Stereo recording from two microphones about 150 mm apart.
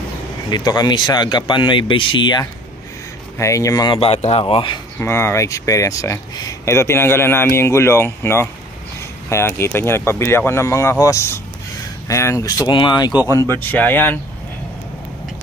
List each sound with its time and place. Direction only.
0.5 s speech: 30° left (ahead or behind)
3.3 s speech: 20° left (ahead or behind); by 4.7 s 35° left (ahead or behind)
4.9 s speech: 15° left (ahead or behind)